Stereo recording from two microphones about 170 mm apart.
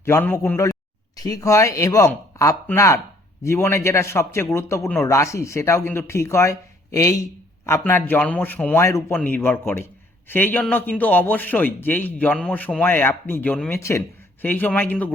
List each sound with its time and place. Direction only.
0.0 s a man's voice: 15° left (ahead or behind)